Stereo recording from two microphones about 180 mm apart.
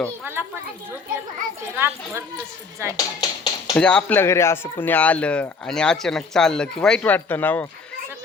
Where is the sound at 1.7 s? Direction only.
15° right (ahead or behind).